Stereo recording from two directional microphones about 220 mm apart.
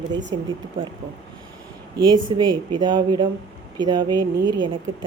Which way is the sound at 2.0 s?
20° right (ahead or behind).